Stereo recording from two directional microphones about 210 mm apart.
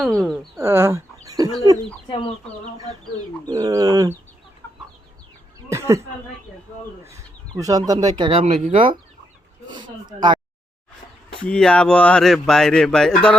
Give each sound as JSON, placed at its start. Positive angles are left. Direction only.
{"t": 0.5, "sound": "speech", "side_deg": -10}
{"t": 3.4, "sound": "speech", "side_deg": -15}
{"t": 4.6, "sound": "chicken", "side_deg": 10}
{"t": 5.6, "sound": "speech", "side_deg": -15}
{"t": 11.4, "sound": "speech", "side_deg": 5}